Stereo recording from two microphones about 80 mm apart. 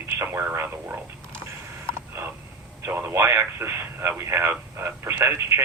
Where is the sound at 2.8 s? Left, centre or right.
Right.